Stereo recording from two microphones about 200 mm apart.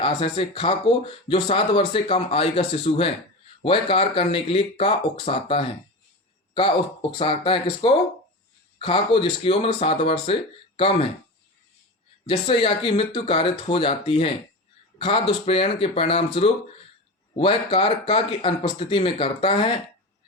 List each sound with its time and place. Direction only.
0.0 s speech: 25° left (ahead or behind)
12.5 s speech: 25° left (ahead or behind)